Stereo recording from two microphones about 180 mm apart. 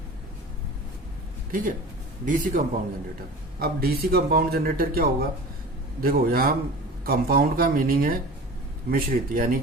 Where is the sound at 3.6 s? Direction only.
60° right (ahead or behind).